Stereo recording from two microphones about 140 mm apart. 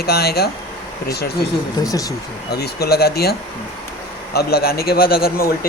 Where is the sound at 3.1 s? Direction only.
90° left.